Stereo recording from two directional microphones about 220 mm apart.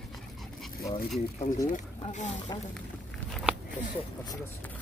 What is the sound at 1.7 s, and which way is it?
Speech, 35° left (ahead or behind).